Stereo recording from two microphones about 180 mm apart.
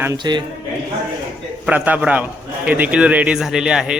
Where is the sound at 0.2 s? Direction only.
25° right (ahead or behind).